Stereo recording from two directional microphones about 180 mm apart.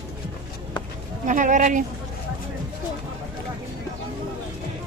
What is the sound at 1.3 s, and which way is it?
Speech, 45° right (ahead or behind).